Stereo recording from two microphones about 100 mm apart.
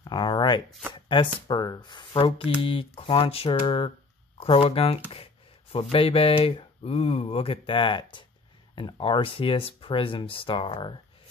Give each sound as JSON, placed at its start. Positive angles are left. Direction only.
{"t": 0.0, "sound": "a sound", "side_deg": 50}
{"t": 1.0, "sound": "speech", "side_deg": 55}
{"t": 4.4, "sound": "speech", "side_deg": 80}